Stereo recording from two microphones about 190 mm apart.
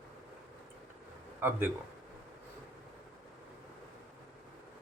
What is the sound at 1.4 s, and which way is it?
Speech, 10° right (ahead or behind).